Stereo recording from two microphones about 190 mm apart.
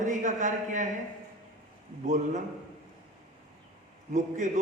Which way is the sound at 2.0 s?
40° right (ahead or behind).